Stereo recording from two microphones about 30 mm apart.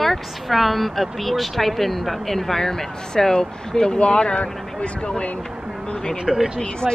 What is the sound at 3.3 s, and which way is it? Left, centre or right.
Speech, left.